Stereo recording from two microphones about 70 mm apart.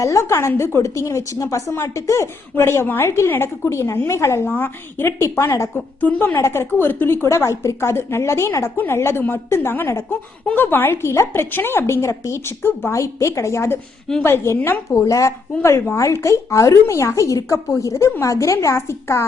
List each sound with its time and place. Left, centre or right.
0.0 s a woman's voice: left
5.2 s speech: left
5.7 s a woman's voice: left
6.3 s a woman's voice: left
12.9 s a woman's voice: left